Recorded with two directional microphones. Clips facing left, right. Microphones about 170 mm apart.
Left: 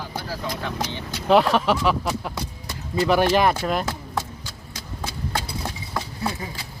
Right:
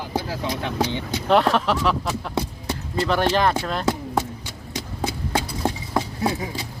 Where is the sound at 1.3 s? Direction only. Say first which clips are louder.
Left 1 dB; centre (ahead or behind).